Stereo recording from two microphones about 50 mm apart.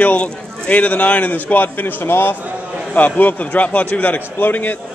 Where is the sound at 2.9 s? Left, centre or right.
Left.